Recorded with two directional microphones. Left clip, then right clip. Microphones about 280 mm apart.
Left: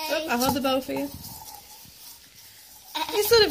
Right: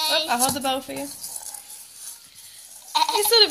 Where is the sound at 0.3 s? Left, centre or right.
Centre.